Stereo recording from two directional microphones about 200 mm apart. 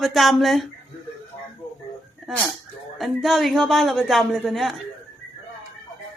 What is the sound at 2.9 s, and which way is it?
A woman's voice, centre (ahead or behind).